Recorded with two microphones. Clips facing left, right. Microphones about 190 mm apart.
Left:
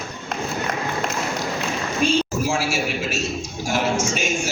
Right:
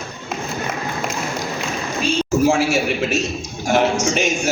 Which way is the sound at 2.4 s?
60° right (ahead or behind).